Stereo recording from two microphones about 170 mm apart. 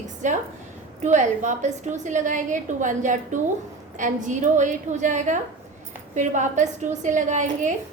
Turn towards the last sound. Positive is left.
turn(degrees=-45)  # may be behind; listen again after turning